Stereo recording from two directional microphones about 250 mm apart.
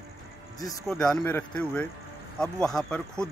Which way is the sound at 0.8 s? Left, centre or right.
Centre.